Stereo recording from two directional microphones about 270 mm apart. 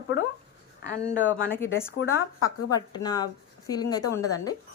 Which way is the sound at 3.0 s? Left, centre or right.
Centre.